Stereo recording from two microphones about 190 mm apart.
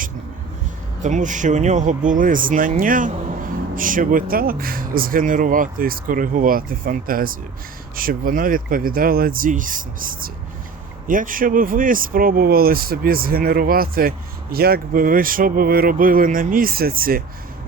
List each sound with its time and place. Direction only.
1.0 s speech: 40° right (ahead or behind)